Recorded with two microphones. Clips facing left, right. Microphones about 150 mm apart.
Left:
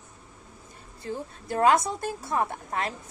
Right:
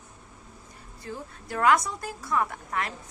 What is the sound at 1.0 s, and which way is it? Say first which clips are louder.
A woman's voice: left 4 dB; 25° left (ahead or behind).